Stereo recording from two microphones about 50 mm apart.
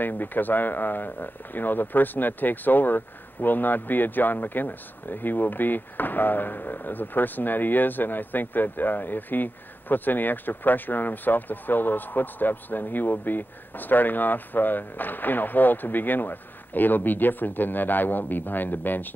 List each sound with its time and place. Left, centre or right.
0.0 s speech: left